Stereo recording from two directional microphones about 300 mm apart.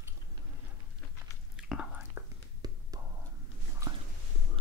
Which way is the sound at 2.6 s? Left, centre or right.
Centre.